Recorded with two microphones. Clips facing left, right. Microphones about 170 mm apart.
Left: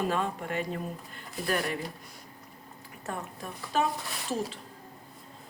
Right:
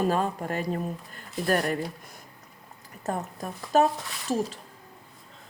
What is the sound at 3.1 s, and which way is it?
Speech, 40° right (ahead or behind).